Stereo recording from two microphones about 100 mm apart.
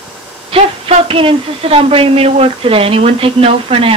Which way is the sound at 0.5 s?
85° right.